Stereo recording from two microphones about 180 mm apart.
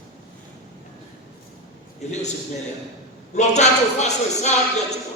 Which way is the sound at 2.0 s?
40° left (ahead or behind).